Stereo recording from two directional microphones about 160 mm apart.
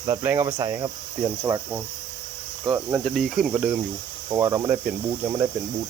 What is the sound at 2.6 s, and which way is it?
Cricket, 25° right (ahead or behind).